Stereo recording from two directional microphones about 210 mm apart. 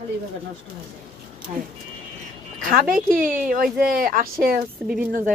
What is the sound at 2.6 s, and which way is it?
Speech, 40° right (ahead or behind).